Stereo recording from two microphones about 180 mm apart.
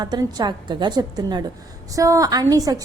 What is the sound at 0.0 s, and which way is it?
A woman's voice, 20° right (ahead or behind).